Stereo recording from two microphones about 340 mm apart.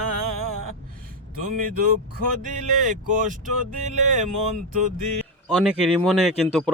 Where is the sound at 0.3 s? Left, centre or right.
Right.